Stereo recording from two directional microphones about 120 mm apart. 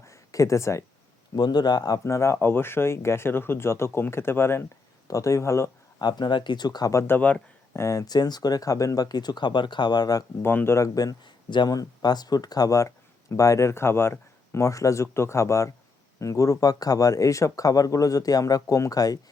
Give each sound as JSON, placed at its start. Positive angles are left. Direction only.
{"t": 0.1, "sound": "a sound", "side_deg": 25}
{"t": 1.4, "sound": "speech", "side_deg": 35}
{"t": 6.0, "sound": "speech", "side_deg": 35}
{"t": 7.1, "sound": "speech", "side_deg": 10}
{"t": 7.8, "sound": "speech", "side_deg": 25}
{"t": 10.4, "sound": "speech", "side_deg": 20}